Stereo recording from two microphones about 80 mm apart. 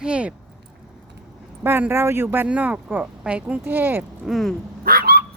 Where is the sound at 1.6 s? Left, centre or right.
Right.